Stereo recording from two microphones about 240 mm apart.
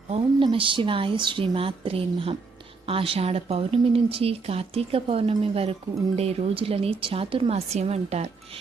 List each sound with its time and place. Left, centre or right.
0.1 s speech: right